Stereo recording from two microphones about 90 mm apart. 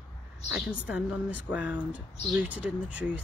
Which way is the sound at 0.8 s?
15° right (ahead or behind).